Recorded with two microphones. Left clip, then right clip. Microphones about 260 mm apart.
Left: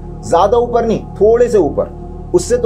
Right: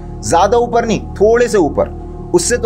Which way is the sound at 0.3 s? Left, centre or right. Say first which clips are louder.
Even; right.